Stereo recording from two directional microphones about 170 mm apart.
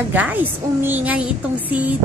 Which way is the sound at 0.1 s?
10° right (ahead or behind).